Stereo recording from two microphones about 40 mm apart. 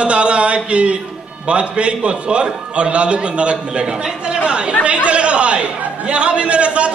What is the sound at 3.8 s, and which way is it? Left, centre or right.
A man's voice, centre.